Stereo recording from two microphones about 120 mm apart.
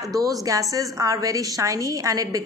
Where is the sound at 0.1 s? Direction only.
30° right (ahead or behind).